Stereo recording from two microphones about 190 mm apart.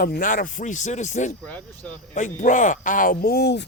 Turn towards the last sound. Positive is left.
turn(degrees=60)  # may be behind; listen again after turning